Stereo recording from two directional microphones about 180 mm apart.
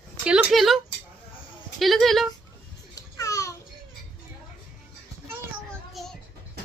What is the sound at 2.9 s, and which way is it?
Babbling, 20° left (ahead or behind).